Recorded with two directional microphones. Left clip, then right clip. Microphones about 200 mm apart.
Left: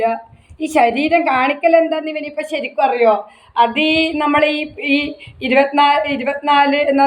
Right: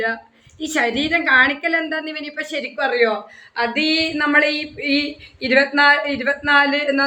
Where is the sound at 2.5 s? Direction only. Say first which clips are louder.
Left 5 dB; 45° right (ahead or behind).